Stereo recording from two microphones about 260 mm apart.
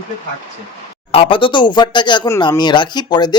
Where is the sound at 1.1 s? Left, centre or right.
Centre.